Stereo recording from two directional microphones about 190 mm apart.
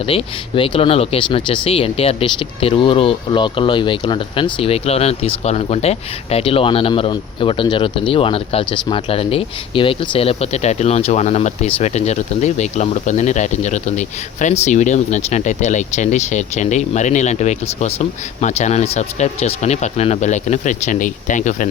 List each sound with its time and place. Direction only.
0.0 s speech: 30° left (ahead or behind)